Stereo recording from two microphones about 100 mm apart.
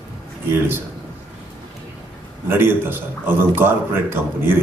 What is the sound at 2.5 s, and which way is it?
A man's voice, 20° right (ahead or behind).